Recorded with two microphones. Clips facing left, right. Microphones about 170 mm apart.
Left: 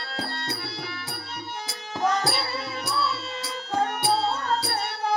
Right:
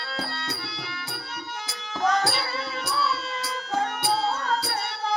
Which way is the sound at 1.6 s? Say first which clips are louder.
Even; 30° left (ahead or behind).